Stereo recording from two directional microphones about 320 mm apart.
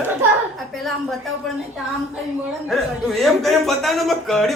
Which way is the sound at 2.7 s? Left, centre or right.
Centre.